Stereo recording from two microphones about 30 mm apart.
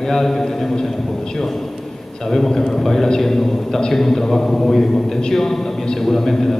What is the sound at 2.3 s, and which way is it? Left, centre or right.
A man's voice, centre.